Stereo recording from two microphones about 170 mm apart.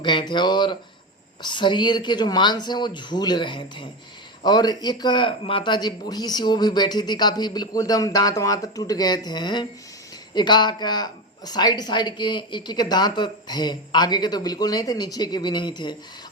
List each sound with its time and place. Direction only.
0.0 s speech: 25° left (ahead or behind)